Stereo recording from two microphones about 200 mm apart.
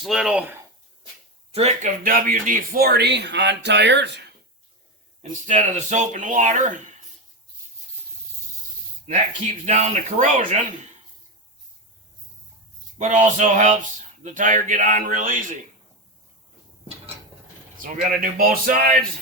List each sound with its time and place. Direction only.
0.0 s speech: centre (ahead or behind)
1.5 s speech: 35° right (ahead or behind); by 4.2 s 60° right (ahead or behind)
5.5 s speech: 35° right (ahead or behind)
9.6 s speech: 35° right (ahead or behind)
13.0 s speech: 35° right (ahead or behind)
17.7 s speech: 40° right (ahead or behind)